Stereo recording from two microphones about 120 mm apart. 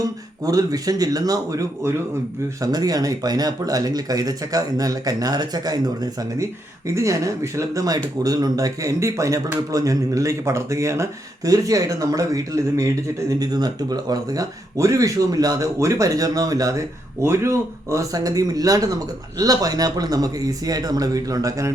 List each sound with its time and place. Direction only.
0.4 s a man's voice: 30° right (ahead or behind)